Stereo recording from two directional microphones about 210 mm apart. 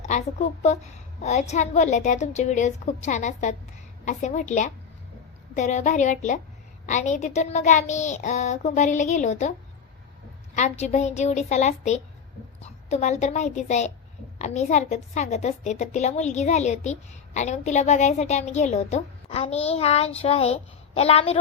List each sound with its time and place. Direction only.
0.0 s a woman's voice: 35° left (ahead or behind)
10.5 s a woman's voice: 35° left (ahead or behind)